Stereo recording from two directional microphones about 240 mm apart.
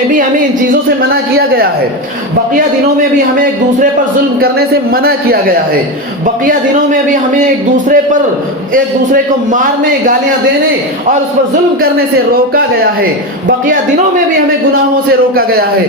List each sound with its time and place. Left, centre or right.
1.4 s a man's voice: right
4.4 s a man's voice: right